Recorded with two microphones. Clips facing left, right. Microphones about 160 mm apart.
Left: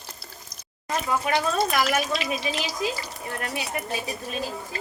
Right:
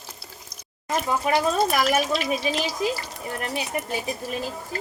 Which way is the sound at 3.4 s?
25° right (ahead or behind).